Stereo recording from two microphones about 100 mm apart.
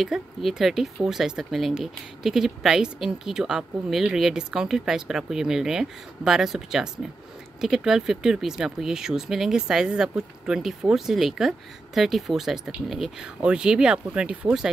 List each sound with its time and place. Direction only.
0.0 s speech: centre (ahead or behind)